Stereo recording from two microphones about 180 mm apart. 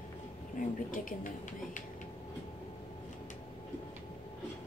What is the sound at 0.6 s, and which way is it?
Speech, 45° left (ahead or behind).